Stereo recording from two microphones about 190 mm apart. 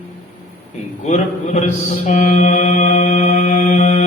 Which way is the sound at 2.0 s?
40° left (ahead or behind).